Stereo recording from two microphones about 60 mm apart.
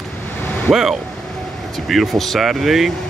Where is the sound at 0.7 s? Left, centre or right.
Centre.